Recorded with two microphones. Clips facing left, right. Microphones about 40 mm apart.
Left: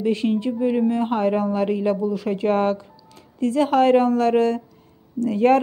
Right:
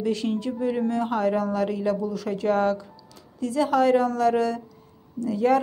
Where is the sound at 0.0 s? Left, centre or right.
Left.